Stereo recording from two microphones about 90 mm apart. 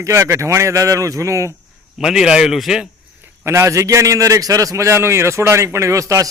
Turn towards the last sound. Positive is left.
turn(degrees=-35)  # may be behind; listen again after turning